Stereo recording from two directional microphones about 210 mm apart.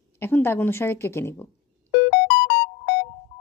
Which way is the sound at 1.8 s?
55° left (ahead or behind).